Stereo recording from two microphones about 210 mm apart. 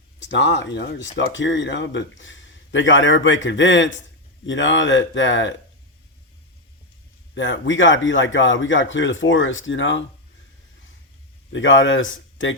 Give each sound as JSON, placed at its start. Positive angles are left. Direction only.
{"t": 0.2, "sound": "a man's voice", "side_deg": 55}
{"t": 7.3, "sound": "a man's voice", "side_deg": 60}
{"t": 11.5, "sound": "a man's voice", "side_deg": 65}